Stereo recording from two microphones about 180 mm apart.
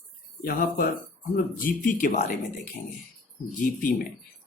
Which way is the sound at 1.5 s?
50° left (ahead or behind).